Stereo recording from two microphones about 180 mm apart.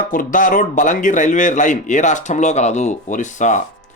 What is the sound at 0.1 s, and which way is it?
A man's voice, 50° left (ahead or behind).